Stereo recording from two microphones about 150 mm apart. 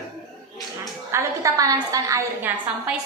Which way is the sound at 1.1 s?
20° right (ahead or behind).